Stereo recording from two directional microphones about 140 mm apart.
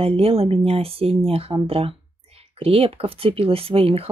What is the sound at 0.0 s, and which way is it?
A woman's voice, 45° right (ahead or behind).